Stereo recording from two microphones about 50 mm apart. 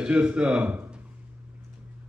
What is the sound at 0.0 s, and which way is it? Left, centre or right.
Speech, right.